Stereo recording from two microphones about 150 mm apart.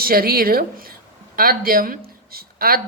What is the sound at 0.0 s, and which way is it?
A woman's voice, 85° right.